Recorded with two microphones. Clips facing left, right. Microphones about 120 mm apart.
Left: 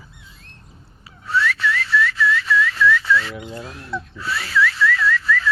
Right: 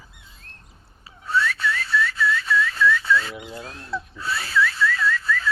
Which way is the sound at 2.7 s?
35° right (ahead or behind).